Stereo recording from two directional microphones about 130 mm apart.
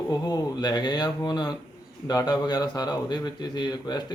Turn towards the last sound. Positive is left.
turn(degrees=35)  # may be behind; listen again after turning